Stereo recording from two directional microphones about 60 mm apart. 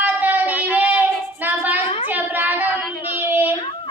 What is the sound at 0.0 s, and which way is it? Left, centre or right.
Child singing, right.